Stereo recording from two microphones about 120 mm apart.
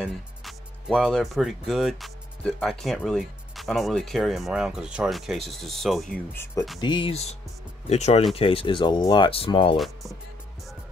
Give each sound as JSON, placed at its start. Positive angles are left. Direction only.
{"t": 0.0, "sound": "speech", "side_deg": 0}
{"t": 6.3, "sound": "speech", "side_deg": 20}
{"t": 6.8, "sound": "speech", "side_deg": 40}
{"t": 7.9, "sound": "speech", "side_deg": 65}
{"t": 8.4, "sound": "speech", "side_deg": 50}